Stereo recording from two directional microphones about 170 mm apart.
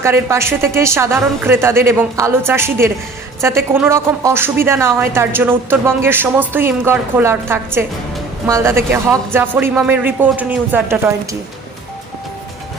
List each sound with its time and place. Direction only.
0.0 s a woman's voice: 15° right (ahead or behind)